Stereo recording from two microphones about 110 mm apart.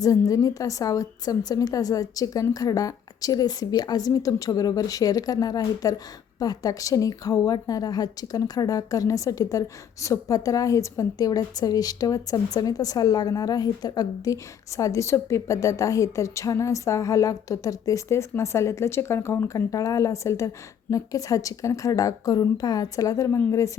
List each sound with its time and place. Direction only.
0.3 s a woman's voice: 35° left (ahead or behind)